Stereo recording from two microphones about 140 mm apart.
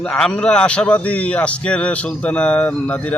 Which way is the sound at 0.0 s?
5° left (ahead or behind).